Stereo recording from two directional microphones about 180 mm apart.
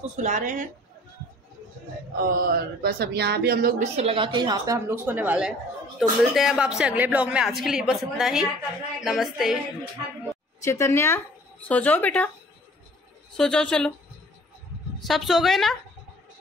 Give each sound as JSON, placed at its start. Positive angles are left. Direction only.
{"t": 0.1, "sound": "speech", "side_deg": -45}
{"t": 2.3, "sound": "speech", "side_deg": -55}
{"t": 3.8, "sound": "a woman's voice", "side_deg": -35}
{"t": 10.6, "sound": "speech", "side_deg": 15}
{"t": 13.4, "sound": "speech", "side_deg": 5}
{"t": 15.0, "sound": "speech", "side_deg": 0}